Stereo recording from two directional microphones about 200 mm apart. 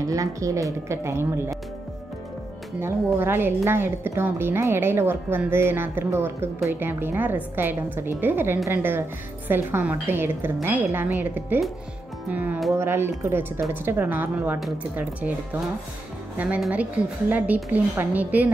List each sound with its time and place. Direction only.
0.0 s a woman's voice: 15° right (ahead or behind)
2.8 s a woman's voice: 10° right (ahead or behind)
16.3 s a woman's voice: 5° right (ahead or behind)